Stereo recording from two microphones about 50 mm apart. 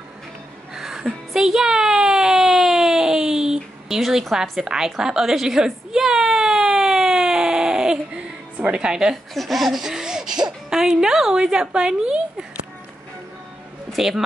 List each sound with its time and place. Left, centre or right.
0.7 s a sound: centre
8.5 s a woman's voice: right
8.8 s a woman's voice: centre
9.1 s speech: centre
9.9 s a sound: centre
11.6 s a woman's voice: centre
13.9 s speech: centre